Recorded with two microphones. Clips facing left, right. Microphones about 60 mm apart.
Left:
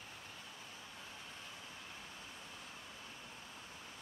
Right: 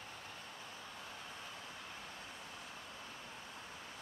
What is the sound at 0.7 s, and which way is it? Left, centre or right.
Vehicle, right.